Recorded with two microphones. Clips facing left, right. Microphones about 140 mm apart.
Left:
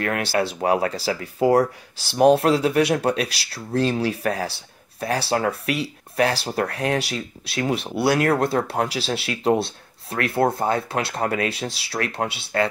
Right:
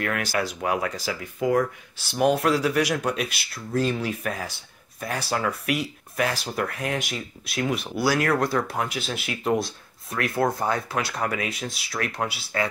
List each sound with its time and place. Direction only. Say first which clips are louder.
0.2 s speech: left 4 dB; 30° left (ahead or behind)